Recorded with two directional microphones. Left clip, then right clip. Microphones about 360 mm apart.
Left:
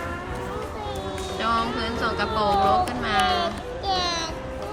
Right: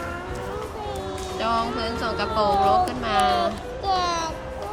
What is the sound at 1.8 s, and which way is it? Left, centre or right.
Speech, centre.